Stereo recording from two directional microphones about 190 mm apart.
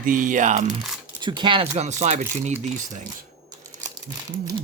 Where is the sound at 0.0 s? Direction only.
45° right (ahead or behind).